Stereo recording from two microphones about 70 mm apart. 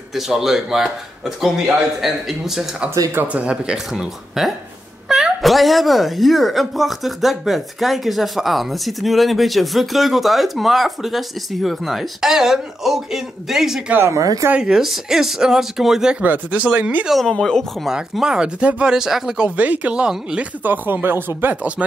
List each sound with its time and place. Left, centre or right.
0.1 s speech: centre
3.2 s speech: right; by 13.8 s centre
14.1 s speech: right
14.6 s speech: centre
16.2 s speech: right
17.0 s speech: centre
17.8 s speech: centre
19.5 s speech: right
20.6 s speech: right